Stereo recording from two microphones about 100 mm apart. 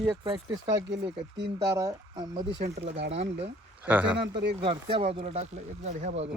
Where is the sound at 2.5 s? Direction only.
90° right.